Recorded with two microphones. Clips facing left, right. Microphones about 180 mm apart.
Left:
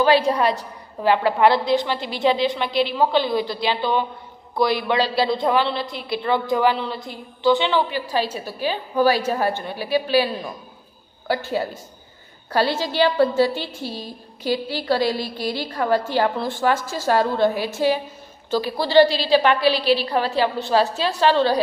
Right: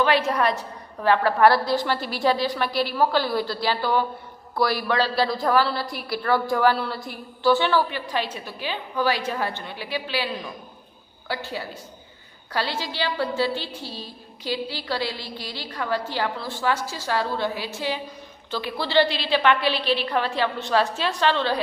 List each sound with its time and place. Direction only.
0.0 s a woman's voice: 30° left (ahead or behind)
7.9 s a woman's voice: 35° left (ahead or behind)
13.8 s a woman's voice: 15° left (ahead or behind)
14.4 s a woman's voice: 45° left (ahead or behind)